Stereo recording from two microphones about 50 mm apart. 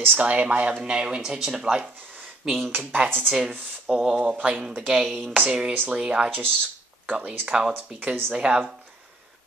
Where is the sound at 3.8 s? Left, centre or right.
Centre.